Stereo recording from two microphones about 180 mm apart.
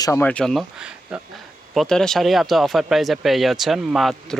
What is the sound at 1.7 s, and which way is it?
Speech, 5° left (ahead or behind).